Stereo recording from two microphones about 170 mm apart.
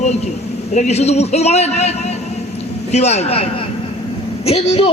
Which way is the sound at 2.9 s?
40° left (ahead or behind).